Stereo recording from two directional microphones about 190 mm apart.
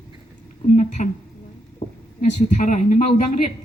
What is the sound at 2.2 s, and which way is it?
Speech, 40° left (ahead or behind).